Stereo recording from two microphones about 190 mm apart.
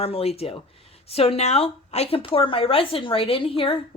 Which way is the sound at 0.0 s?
30° left (ahead or behind).